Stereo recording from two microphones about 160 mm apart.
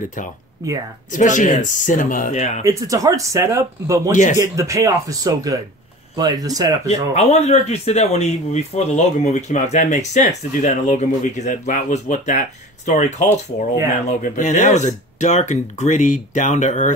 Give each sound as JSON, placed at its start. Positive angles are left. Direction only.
{"t": 0.6, "sound": "speech", "side_deg": -20}
{"t": 1.1, "sound": "speech", "side_deg": 50}
{"t": 2.6, "sound": "speech", "side_deg": -20}
{"t": 6.9, "sound": "speech", "side_deg": 40}